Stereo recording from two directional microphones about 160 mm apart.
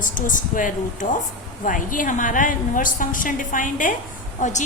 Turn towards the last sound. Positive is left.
turn(degrees=50)  # may be behind; listen again after turning